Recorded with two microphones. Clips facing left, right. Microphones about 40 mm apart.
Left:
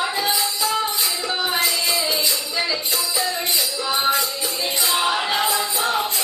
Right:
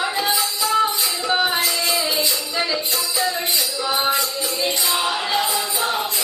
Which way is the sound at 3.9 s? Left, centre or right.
Centre.